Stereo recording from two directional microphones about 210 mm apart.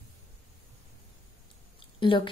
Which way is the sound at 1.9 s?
25° left (ahead or behind).